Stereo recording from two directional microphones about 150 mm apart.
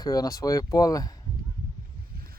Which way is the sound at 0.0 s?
25° left (ahead or behind).